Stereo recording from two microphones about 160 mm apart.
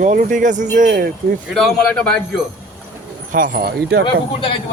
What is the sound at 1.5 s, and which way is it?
Speech, centre (ahead or behind).